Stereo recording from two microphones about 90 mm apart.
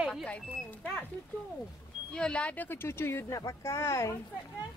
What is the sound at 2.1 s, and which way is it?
Speech, 10° left (ahead or behind).